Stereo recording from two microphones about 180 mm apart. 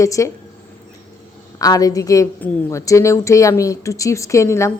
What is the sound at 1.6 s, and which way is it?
A woman's voice, 20° left (ahead or behind).